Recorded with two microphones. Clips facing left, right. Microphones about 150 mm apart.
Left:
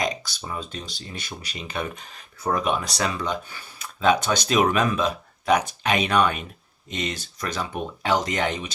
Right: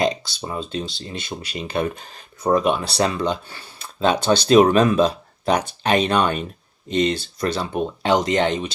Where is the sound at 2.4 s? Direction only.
25° right (ahead or behind).